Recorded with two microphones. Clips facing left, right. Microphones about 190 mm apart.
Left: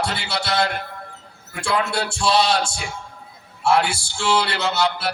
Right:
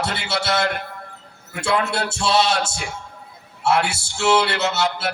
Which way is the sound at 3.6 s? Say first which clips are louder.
Left 1 dB; 25° right (ahead or behind).